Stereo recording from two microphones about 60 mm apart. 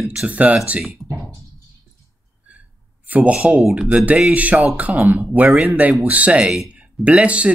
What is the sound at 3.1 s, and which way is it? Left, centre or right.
Speech, right.